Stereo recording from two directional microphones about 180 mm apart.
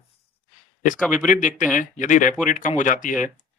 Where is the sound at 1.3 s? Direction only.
45° left (ahead or behind).